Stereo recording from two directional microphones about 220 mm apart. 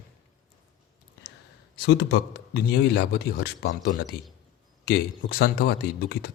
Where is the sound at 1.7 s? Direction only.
50° left (ahead or behind).